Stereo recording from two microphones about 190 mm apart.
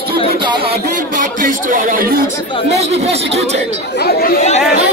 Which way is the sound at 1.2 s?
45° right (ahead or behind).